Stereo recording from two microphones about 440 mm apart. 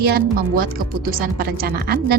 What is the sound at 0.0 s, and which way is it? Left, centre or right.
Speech, centre.